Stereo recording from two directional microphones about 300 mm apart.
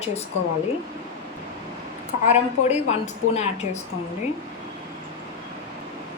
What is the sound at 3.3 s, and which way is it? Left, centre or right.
Speech, left.